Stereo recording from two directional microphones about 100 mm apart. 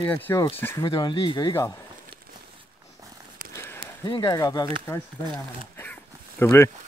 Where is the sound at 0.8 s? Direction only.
50° left (ahead or behind).